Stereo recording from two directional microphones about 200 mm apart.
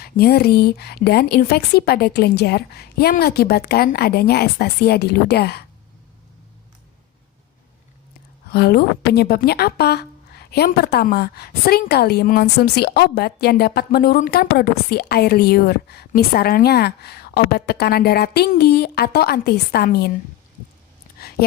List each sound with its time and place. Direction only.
0.0 s a woman's voice: 50° left (ahead or behind)
8.4 s a woman's voice: 50° left (ahead or behind)